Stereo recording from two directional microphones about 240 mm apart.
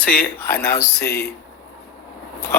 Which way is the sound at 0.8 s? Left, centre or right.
Left.